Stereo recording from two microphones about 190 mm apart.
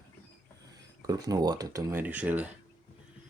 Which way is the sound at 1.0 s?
20° right (ahead or behind).